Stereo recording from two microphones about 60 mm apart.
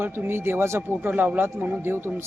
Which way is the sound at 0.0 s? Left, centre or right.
Right.